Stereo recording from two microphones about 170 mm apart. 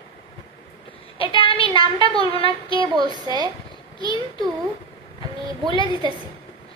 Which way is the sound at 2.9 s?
25° right (ahead or behind).